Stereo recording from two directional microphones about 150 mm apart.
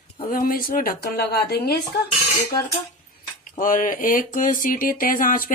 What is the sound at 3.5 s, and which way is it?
Speech, 60° left (ahead or behind).